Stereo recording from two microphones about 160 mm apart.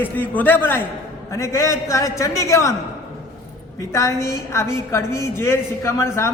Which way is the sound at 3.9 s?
20° left (ahead or behind).